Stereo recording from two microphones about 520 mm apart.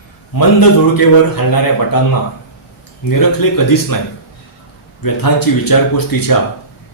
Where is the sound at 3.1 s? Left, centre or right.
Left.